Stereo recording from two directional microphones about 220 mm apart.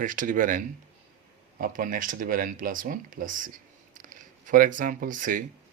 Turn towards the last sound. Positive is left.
turn(degrees=-35)  # may be behind; listen again after turning